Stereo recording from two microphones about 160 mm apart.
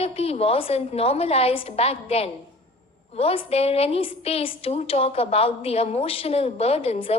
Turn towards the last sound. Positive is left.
turn(degrees=35)  # may be behind; listen again after turning